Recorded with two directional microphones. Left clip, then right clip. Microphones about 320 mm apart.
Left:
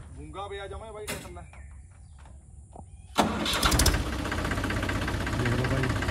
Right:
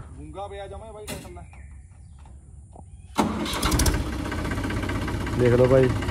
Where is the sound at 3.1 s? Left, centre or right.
Centre.